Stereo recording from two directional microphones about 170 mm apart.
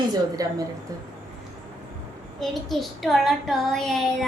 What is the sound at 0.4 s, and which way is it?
Speech, 20° right (ahead or behind).